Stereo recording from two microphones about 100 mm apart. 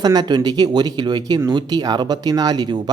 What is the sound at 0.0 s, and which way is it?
Speech, 40° right (ahead or behind).